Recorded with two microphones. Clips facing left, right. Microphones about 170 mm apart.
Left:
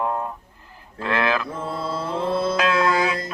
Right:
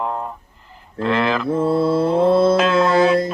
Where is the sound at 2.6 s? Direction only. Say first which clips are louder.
Right 5 dB; 25° right (ahead or behind).